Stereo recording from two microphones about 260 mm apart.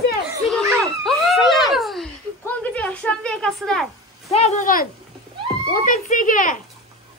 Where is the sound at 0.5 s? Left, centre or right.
Centre.